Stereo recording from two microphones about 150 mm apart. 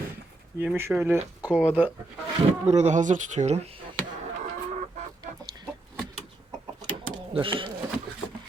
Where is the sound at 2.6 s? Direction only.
50° right (ahead or behind).